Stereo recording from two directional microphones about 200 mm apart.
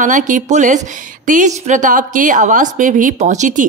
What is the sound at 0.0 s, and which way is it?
A woman's voice, 40° right (ahead or behind).